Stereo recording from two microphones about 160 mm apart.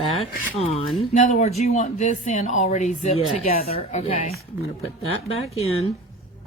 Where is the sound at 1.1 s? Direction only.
45° left (ahead or behind).